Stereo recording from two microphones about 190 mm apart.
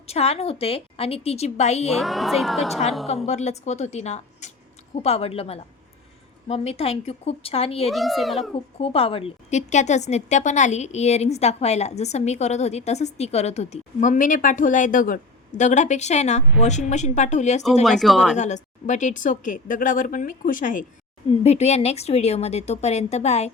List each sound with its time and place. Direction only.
0.1 s a woman's voice: 30° left (ahead or behind)
2.0 s a woman's voice: centre (ahead or behind)
3.2 s a woman's voice: 35° left (ahead or behind)
7.9 s a woman's voice: centre (ahead or behind)
8.5 s a woman's voice: 30° left (ahead or behind)
17.8 s a woman's voice: centre (ahead or behind)
18.3 s a woman's voice: 40° left (ahead or behind)